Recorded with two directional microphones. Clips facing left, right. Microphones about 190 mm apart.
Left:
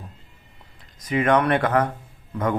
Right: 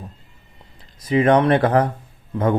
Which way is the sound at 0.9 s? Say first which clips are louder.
Right 4 dB; 30° right (ahead or behind).